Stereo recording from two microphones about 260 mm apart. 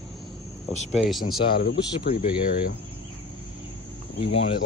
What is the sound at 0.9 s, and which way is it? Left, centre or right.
Speech, centre.